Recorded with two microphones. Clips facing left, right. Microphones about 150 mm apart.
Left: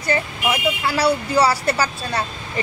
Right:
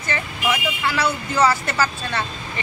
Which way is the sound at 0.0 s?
35° left (ahead or behind).